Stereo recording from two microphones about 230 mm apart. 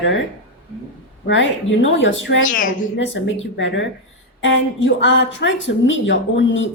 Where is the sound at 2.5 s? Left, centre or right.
Left.